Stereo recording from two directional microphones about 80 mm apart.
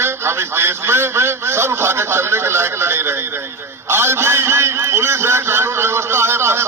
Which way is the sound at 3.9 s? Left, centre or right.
Right.